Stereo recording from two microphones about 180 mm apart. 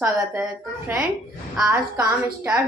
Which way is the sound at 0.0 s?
10° right (ahead or behind).